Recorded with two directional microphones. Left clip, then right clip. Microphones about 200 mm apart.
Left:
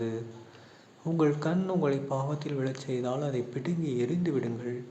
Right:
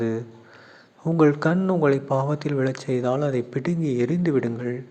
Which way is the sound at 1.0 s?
35° right (ahead or behind).